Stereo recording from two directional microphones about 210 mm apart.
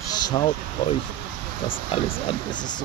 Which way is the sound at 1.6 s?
25° left (ahead or behind).